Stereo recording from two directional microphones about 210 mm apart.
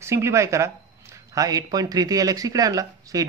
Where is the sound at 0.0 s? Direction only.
15° right (ahead or behind).